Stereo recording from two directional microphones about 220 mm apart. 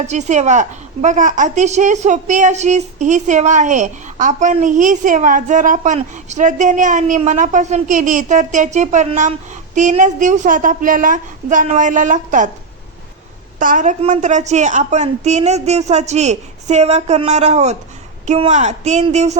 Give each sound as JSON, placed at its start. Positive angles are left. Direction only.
{"t": 0.1, "sound": "a woman's voice", "side_deg": -30}
{"t": 13.6, "sound": "a woman's voice", "side_deg": -35}